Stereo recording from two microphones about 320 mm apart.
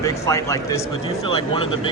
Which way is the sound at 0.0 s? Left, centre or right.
Centre.